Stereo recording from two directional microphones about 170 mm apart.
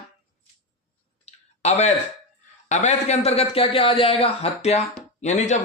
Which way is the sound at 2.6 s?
45° left (ahead or behind).